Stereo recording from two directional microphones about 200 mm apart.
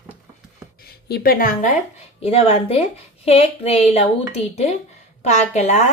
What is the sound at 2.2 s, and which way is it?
A woman's voice, 30° left (ahead or behind).